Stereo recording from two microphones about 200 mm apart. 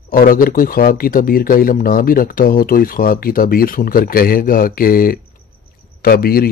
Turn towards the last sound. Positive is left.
turn(degrees=50)  # may be behind; listen again after turning